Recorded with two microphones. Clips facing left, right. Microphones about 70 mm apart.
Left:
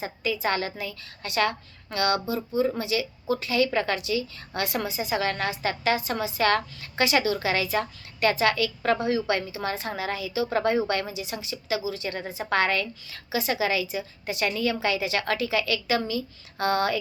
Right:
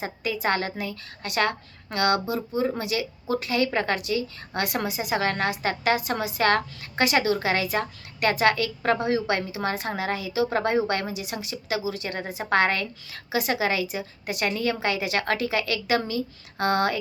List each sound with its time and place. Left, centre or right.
0.0 s a woman's voice: right